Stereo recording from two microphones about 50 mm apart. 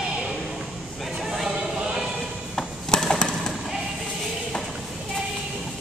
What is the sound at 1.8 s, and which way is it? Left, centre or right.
Music, centre.